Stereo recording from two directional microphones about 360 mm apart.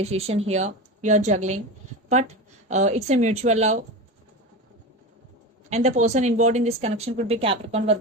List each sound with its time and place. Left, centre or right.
0.0 s a woman's voice: centre
5.7 s speech: centre